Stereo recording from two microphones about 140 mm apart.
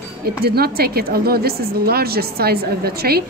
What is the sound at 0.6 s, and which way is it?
A woman's voice, 90° right.